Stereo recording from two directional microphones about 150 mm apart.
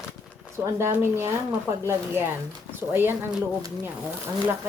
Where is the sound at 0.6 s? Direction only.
15° right (ahead or behind).